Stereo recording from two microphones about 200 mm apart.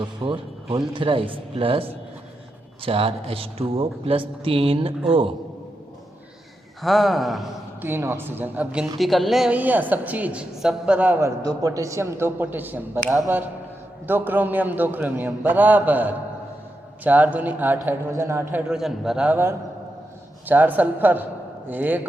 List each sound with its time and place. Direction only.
0.0 s speech: 25° right (ahead or behind)
6.8 s a man's voice: centre (ahead or behind)
7.9 s a woman's voice: 10° right (ahead or behind)